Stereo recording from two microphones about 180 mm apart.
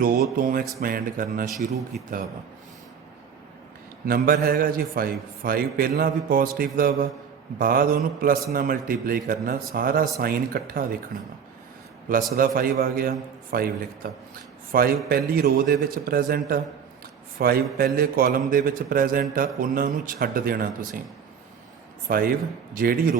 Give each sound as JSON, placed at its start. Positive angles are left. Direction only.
{"t": 0.0, "sound": "a man's voice", "side_deg": -50}
{"t": 4.0, "sound": "a man's voice", "side_deg": -55}
{"t": 12.0, "sound": "a man's voice", "side_deg": -50}
{"t": 22.0, "sound": "a man's voice", "side_deg": -55}